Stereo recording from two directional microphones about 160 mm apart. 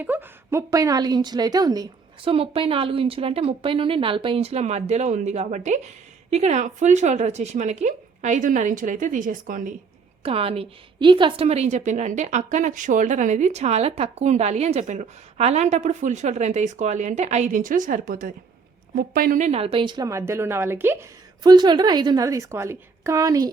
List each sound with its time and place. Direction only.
0.0 s a woman's voice: 10° right (ahead or behind)
2.3 s a woman's voice: 35° right (ahead or behind); by 9.7 s 55° right (ahead or behind)
10.2 s a woman's voice: 35° right (ahead or behind); by 19.5 s 60° right (ahead or behind)
19.5 s a woman's voice: 40° right (ahead or behind)
20.1 s a woman's voice: 15° right (ahead or behind)
21.4 s a woman's voice: 25° right (ahead or behind)